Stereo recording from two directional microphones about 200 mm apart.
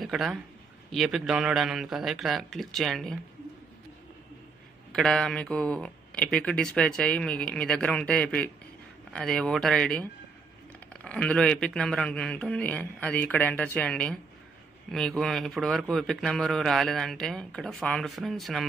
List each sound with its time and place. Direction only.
0.0 s a man's voice: centre (ahead or behind)
4.9 s a man's voice: 5° left (ahead or behind)